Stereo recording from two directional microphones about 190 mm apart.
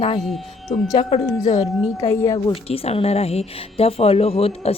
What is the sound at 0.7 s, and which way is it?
A woman's voice, 25° left (ahead or behind).